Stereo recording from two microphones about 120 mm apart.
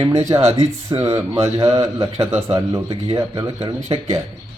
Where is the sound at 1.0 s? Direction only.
25° right (ahead or behind).